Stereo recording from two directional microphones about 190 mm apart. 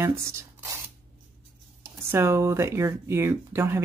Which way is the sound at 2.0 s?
15° right (ahead or behind).